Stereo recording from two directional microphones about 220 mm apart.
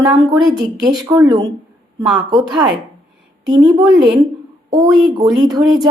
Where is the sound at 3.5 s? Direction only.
20° right (ahead or behind).